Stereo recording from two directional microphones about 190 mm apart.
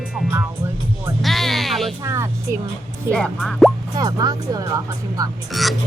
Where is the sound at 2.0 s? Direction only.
15° right (ahead or behind).